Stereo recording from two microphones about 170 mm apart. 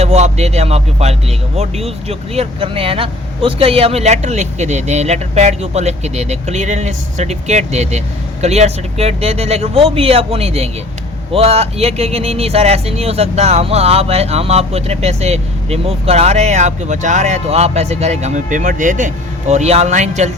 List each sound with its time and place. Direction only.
0.0 s speech: 40° right (ahead or behind)